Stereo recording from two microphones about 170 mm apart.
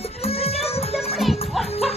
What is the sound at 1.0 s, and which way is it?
Music, centre (ahead or behind).